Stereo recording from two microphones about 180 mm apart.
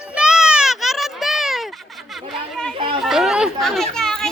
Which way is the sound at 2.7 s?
30° right (ahead or behind).